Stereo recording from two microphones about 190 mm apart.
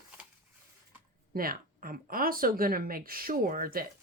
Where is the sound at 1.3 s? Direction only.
50° right (ahead or behind).